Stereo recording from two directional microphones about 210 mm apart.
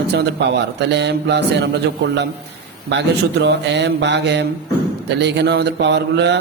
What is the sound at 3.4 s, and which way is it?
A man's voice, 55° right (ahead or behind).